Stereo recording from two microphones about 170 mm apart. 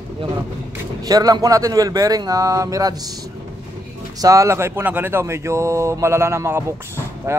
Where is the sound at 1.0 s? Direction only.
20° right (ahead or behind).